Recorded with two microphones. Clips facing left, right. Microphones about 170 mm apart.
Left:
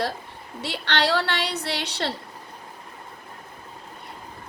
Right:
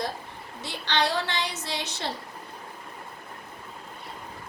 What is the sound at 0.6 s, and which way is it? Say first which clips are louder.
A woman's voice: left 2 dB; 65° left (ahead or behind).